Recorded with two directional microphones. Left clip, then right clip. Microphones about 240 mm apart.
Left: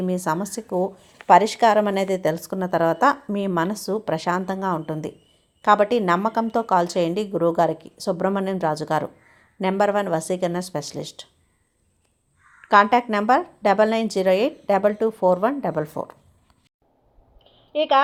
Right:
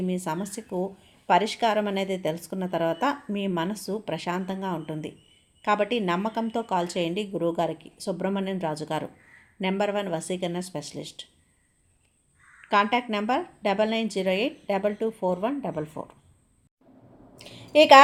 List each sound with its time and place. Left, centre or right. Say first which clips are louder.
0.0 s a woman's voice: left 6 dB; centre
12.6 s a woman's voice: left 7 dB; centre
17.3 s a sound: right 5 dB; centre